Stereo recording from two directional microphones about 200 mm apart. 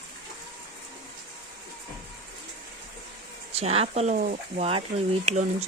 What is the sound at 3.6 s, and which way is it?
Speech, 30° right (ahead or behind).